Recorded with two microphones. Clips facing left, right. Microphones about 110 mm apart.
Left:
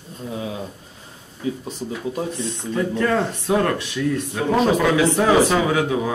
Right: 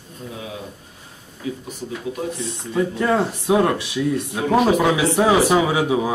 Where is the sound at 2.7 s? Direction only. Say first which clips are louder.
Right 1 dB; 15° right (ahead or behind).